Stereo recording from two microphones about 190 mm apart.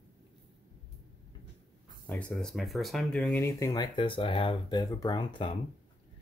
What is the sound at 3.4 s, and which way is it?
Speech, 15° left (ahead or behind).